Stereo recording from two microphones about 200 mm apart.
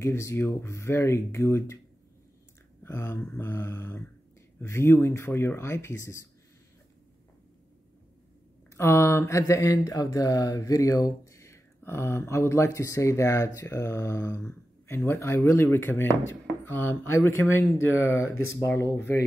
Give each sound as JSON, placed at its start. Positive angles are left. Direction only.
{"t": 0.0, "sound": "mantra", "side_deg": 15}
{"t": 2.8, "sound": "mantra", "side_deg": 10}
{"t": 8.7, "sound": "mantra", "side_deg": 15}